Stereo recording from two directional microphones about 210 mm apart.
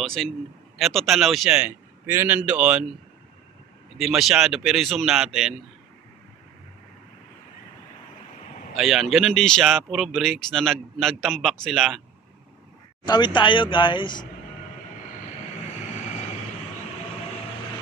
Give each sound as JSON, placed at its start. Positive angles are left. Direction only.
{"t": 0.0, "sound": "speech", "side_deg": 5}
{"t": 4.0, "sound": "speech", "side_deg": 0}
{"t": 8.7, "sound": "speech", "side_deg": 0}
{"t": 13.0, "sound": "speech", "side_deg": 20}